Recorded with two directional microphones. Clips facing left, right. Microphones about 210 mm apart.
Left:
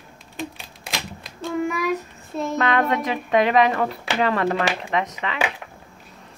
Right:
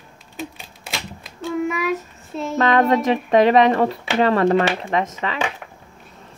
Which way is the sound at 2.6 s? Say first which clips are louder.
Right 6 dB; 40° right (ahead or behind).